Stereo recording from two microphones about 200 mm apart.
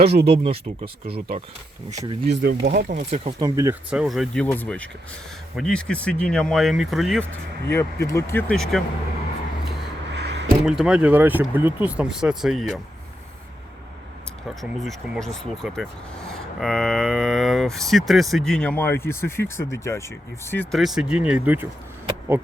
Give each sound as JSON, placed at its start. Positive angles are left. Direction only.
{"t": 0.0, "sound": "speech", "side_deg": -55}
{"t": 0.3, "sound": "speech", "side_deg": -30}
{"t": 1.9, "sound": "speech", "side_deg": -15}
{"t": 2.4, "sound": "speech", "side_deg": -55}
{"t": 2.7, "sound": "speech", "side_deg": -40}
{"t": 3.4, "sound": "speech", "side_deg": -15}
{"t": 3.8, "sound": "speech", "side_deg": -5}
{"t": 7.7, "sound": "speech", "side_deg": 15}
{"t": 10.1, "sound": "a sound", "side_deg": -60}
{"t": 10.7, "sound": "speech", "side_deg": -5}
{"t": 14.6, "sound": "speech", "side_deg": 0}